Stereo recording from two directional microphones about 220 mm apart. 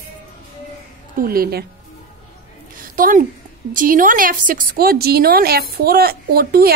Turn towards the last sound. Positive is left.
turn(degrees=-45)  # may be behind; listen again after turning